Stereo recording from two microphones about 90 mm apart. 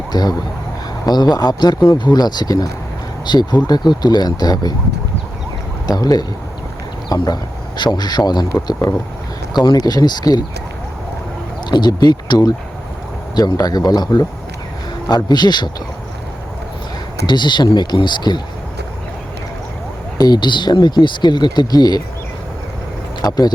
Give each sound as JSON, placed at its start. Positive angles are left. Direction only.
{"t": 0.1, "sound": "speech", "side_deg": 50}
{"t": 5.9, "sound": "speech", "side_deg": 45}
{"t": 9.5, "sound": "speech", "side_deg": 50}
{"t": 11.7, "sound": "speech", "side_deg": 50}
{"t": 17.2, "sound": "speech", "side_deg": 55}
{"t": 20.1, "sound": "speech", "side_deg": 50}
{"t": 23.2, "sound": "speech", "side_deg": 45}